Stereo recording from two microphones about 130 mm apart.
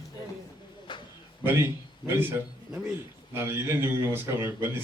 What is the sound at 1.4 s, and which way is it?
A man's voice, 15° right (ahead or behind).